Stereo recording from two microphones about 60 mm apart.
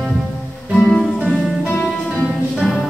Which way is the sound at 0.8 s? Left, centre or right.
Centre.